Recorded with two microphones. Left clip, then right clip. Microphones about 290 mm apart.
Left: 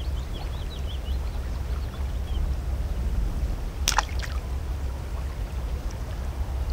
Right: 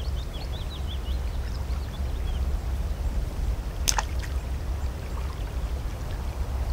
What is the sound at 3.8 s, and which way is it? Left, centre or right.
Boat, left.